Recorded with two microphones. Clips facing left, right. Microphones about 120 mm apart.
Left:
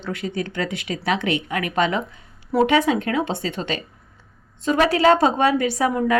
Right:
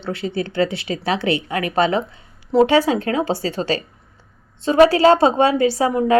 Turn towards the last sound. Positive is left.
turn(degrees=-30)  # may be behind; listen again after turning